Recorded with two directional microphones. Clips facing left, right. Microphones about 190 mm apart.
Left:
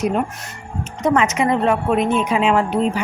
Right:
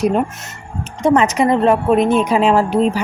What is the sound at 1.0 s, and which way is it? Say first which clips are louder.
Speech: right 4 dB; 35° right (ahead or behind).